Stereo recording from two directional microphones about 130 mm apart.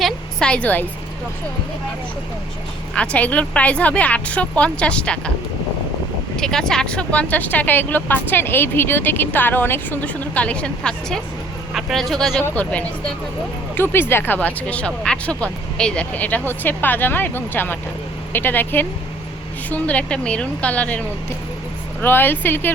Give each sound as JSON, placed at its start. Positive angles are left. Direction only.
{"t": 0.0, "sound": "a sound", "side_deg": 5}
{"t": 2.9, "sound": "speech", "side_deg": 10}
{"t": 6.3, "sound": "speech", "side_deg": 5}
{"t": 13.7, "sound": "speech", "side_deg": 15}
{"t": 22.0, "sound": "speech", "side_deg": 15}